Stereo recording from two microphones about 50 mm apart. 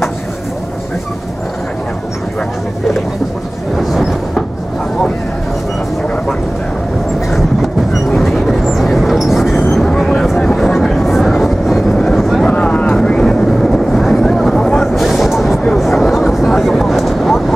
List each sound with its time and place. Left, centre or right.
3.7 s train: centre
8.1 s vehicle: centre
9.8 s vehicle: centre
12.2 s a sound: centre
12.4 s vehicle: left
12.9 s vehicle: centre
14.2 s a sound: centre
14.9 s a sound: centre
15.8 s vehicle: centre